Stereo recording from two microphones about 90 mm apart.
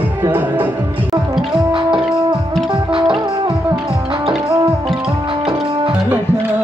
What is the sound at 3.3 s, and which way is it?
Music, 75° right (ahead or behind).